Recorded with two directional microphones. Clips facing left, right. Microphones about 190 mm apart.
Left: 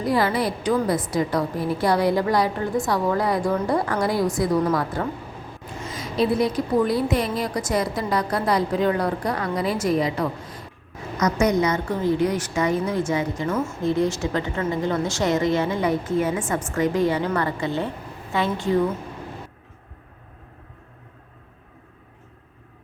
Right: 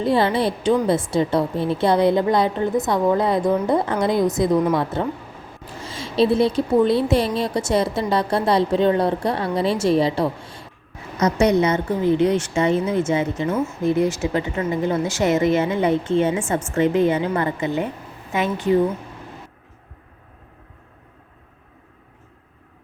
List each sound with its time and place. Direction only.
0.0 s a woman's voice: 25° right (ahead or behind)
13.8 s a woman's voice: 20° left (ahead or behind)
14.2 s a woman's voice: 20° right (ahead or behind)